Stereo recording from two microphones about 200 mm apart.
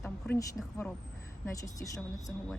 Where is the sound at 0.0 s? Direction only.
10° left (ahead or behind).